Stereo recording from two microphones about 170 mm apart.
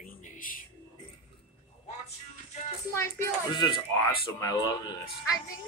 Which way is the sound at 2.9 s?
15° left (ahead or behind).